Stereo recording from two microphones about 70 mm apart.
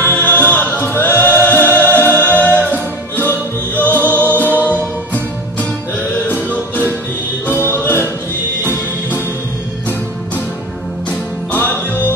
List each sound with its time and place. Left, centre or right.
0.0 s choir: left
4.4 s music: left
7.8 s music: left
11.1 s music: left